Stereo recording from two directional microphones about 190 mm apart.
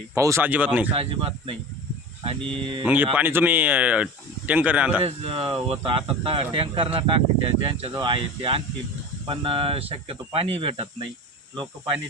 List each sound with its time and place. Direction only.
0.1 s speech: 15° right (ahead or behind)
0.9 s speech: 30° right (ahead or behind)
2.8 s speech: 10° right (ahead or behind)
5.0 s speech: 30° right (ahead or behind)